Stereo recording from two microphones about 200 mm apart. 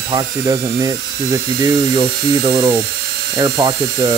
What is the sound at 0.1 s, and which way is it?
Speech, 20° right (ahead or behind).